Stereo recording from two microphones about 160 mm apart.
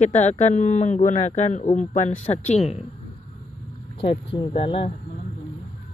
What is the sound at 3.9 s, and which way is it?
Speech, 30° left (ahead or behind).